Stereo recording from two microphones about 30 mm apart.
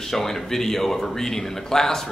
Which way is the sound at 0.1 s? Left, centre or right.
Centre.